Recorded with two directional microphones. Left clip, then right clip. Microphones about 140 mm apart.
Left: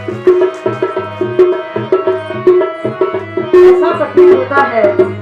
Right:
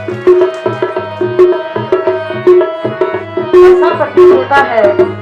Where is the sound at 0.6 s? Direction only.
30° right (ahead or behind).